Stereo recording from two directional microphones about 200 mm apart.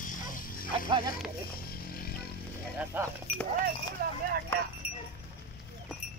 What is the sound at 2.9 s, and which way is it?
Speech, 10° right (ahead or behind).